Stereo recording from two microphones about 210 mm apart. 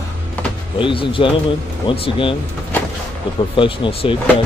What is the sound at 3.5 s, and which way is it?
Speech, 25° left (ahead or behind).